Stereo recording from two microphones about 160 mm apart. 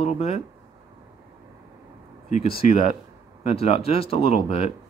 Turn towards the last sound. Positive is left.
turn(degrees=40)  # may be behind; listen again after turning